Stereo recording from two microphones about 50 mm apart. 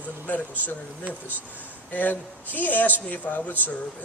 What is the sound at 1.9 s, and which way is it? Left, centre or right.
Speech, left.